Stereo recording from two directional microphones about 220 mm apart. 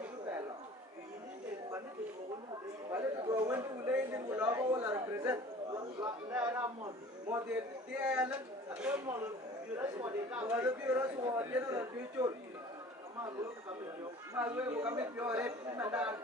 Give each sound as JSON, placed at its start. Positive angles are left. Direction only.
{"t": 2.9, "sound": "a man's voice", "side_deg": -15}
{"t": 14.3, "sound": "speech", "side_deg": -10}